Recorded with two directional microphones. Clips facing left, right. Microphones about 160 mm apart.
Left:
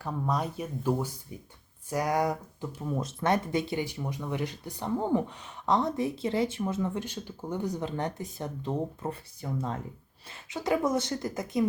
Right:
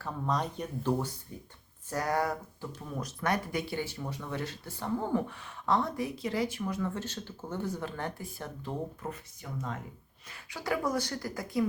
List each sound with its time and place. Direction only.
0.0 s speech: 10° left (ahead or behind)